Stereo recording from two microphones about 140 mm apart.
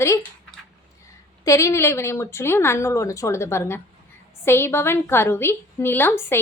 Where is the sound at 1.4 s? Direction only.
20° left (ahead or behind).